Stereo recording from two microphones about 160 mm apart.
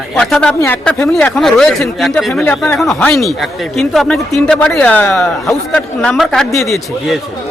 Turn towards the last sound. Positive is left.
turn(degrees=0)  # may be behind; listen again after turning